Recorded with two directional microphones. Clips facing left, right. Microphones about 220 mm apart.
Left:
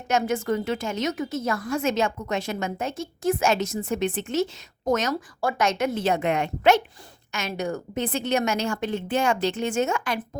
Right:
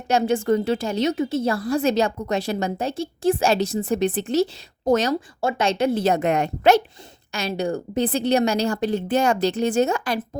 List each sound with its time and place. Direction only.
0.1 s a woman's voice: 30° right (ahead or behind)